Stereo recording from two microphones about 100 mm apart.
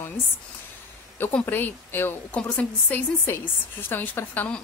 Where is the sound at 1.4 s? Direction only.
20° left (ahead or behind).